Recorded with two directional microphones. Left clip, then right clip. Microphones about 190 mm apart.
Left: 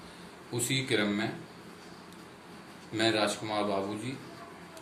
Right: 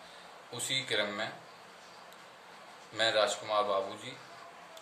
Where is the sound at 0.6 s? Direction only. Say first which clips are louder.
Left 2 dB; 20° right (ahead or behind).